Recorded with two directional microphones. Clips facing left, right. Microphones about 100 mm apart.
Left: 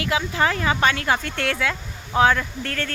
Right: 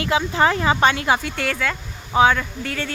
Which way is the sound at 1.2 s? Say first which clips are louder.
Even; 5° right (ahead or behind).